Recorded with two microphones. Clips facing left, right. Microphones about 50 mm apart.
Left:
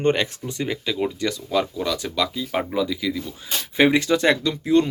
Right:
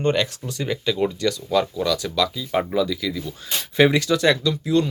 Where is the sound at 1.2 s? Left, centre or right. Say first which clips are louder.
Right 2 dB; centre.